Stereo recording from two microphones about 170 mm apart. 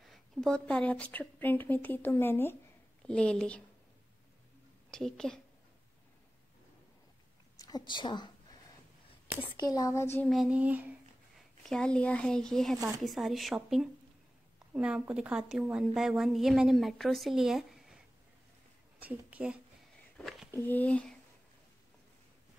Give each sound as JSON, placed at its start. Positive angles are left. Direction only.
{"t": 0.0, "sound": "speech", "side_deg": 0}
{"t": 4.9, "sound": "a woman's voice", "side_deg": 5}
{"t": 7.5, "sound": "a woman's voice", "side_deg": 20}
{"t": 9.6, "sound": "speech", "side_deg": 20}
{"t": 10.3, "sound": "child singing", "side_deg": -5}
{"t": 11.6, "sound": "a woman's voice", "side_deg": 5}
{"t": 18.9, "sound": "a woman's voice", "side_deg": -10}
{"t": 20.2, "sound": "a sound", "side_deg": 0}
{"t": 20.5, "sound": "speech", "side_deg": 10}